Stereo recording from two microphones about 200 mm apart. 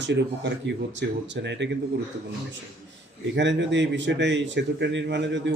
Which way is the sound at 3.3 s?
60° right (ahead or behind).